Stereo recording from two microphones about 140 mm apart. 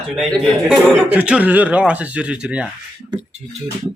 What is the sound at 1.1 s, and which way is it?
Speech, 10° right (ahead or behind).